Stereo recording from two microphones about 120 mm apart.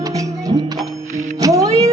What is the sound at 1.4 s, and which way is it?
Music, 30° right (ahead or behind).